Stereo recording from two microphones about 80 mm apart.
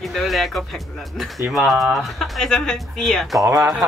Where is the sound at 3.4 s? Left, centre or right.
Right.